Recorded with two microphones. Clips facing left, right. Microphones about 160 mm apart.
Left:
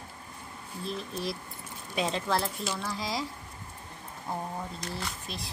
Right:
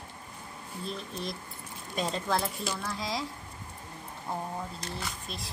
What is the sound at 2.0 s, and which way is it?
Speech, centre (ahead or behind).